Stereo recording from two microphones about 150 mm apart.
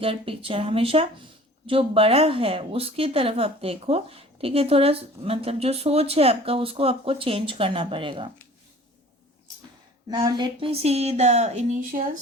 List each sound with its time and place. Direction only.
0.0 s a woman's voice: 35° right (ahead or behind)
10.1 s speech: 30° right (ahead or behind)
10.7 s a woman's voice: 45° right (ahead or behind); by 12.0 s 65° right (ahead or behind)